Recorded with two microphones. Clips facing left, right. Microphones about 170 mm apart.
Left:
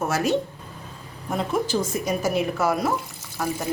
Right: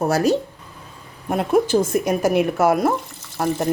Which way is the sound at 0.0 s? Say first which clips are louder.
Right 5 dB; 35° right (ahead or behind).